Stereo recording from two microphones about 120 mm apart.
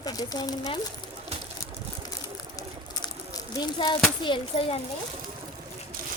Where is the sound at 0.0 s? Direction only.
35° left (ahead or behind).